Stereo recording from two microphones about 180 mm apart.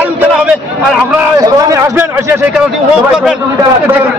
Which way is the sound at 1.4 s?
15° right (ahead or behind).